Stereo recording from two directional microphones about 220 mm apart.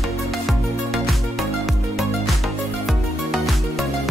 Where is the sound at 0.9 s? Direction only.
Centre (ahead or behind).